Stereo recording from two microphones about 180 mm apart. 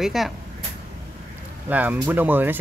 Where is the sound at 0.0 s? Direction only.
Centre (ahead or behind).